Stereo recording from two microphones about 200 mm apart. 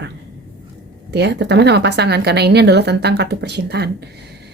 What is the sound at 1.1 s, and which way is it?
Speech, 60° right (ahead or behind).